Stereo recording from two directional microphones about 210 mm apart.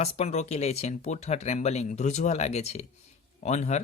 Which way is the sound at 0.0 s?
30° left (ahead or behind).